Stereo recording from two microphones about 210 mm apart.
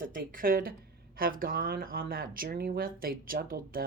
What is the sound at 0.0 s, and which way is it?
A woman's voice, 40° right (ahead or behind).